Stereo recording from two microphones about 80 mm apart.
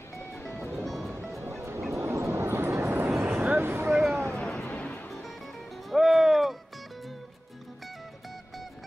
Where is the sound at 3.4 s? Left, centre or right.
Right.